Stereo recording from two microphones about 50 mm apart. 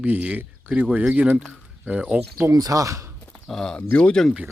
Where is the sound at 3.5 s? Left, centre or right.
Centre.